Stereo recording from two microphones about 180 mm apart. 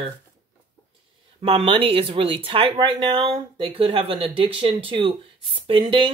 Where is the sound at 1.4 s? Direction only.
30° right (ahead or behind).